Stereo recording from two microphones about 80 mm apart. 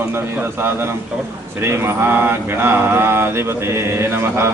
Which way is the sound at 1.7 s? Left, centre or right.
Right.